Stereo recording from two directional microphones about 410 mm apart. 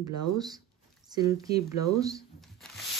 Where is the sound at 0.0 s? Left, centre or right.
Centre.